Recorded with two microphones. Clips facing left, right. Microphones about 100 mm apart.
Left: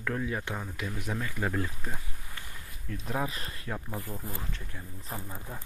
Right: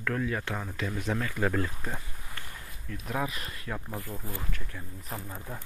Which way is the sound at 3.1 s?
30° left (ahead or behind).